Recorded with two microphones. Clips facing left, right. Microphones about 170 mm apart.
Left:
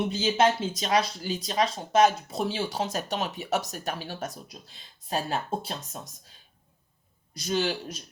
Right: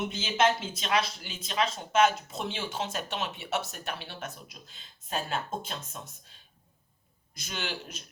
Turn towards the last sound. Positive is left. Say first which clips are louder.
# left 10 dB
turn(degrees=35)  # may be behind; listen again after turning